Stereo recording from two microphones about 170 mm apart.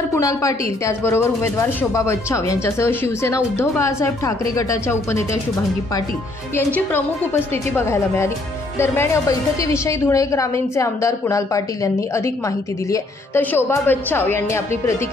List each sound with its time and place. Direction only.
0.1 s speech: 20° left (ahead or behind)
6.5 s a woman's voice: 15° left (ahead or behind)
12.9 s speech: 10° left (ahead or behind)